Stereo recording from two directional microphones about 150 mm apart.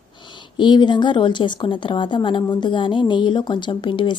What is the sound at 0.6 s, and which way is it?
A woman's voice, 30° left (ahead or behind).